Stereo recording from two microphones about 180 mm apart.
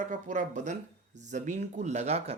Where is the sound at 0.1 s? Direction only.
40° right (ahead or behind).